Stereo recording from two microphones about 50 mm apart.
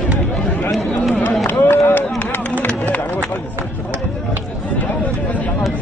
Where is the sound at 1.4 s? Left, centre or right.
Left.